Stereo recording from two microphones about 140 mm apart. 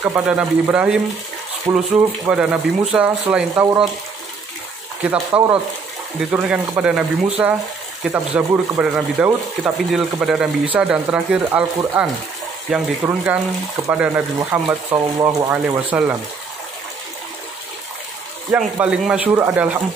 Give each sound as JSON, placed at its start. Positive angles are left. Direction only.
{"t": 0.0, "sound": "speech", "side_deg": -10}
{"t": 5.0, "sound": "speech", "side_deg": -10}
{"t": 18.8, "sound": "speech", "side_deg": -10}